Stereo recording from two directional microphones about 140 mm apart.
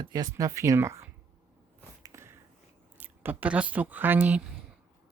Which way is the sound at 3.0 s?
10° right (ahead or behind).